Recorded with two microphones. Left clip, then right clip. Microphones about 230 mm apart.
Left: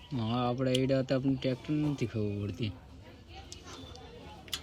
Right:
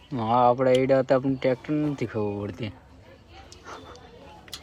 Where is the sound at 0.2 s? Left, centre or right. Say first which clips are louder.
Right 13 dB; right.